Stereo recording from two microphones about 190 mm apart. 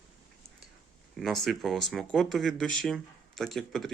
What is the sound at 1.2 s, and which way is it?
Speech, centre (ahead or behind).